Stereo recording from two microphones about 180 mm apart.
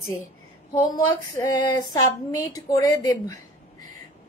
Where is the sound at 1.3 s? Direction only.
20° left (ahead or behind).